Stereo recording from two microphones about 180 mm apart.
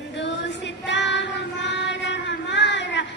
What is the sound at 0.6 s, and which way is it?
Child singing, 80° left.